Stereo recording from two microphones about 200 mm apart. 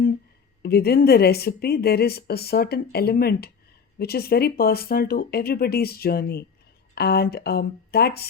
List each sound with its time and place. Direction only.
0.6 s speech: 50° left (ahead or behind)